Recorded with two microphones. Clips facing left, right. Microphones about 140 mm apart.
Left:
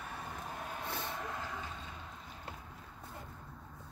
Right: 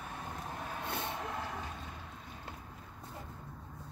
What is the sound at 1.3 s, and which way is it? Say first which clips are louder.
Vehicle: right 2 dB; 65° right (ahead or behind).